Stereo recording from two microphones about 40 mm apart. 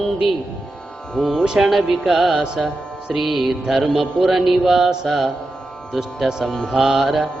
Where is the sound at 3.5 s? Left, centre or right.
Centre.